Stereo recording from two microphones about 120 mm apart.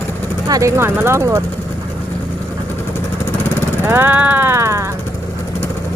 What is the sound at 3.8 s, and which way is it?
Vehicle, 20° right (ahead or behind).